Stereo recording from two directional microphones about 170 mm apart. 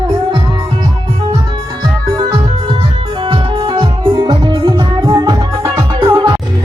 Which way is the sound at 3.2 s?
25° right (ahead or behind).